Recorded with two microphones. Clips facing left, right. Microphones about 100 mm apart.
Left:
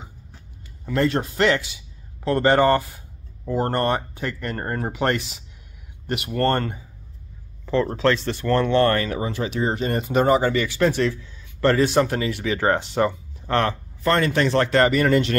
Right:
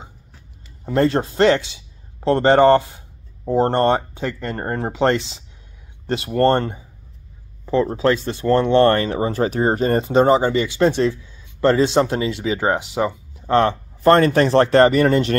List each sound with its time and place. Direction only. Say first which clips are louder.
0.8 s a man's voice: right 4 dB; 35° right (ahead or behind); by 13.1 s 10° right (ahead or behind)
13.5 s speech: right 5 dB; 20° right (ahead or behind)
14.0 s speech: right 6 dB; 40° right (ahead or behind)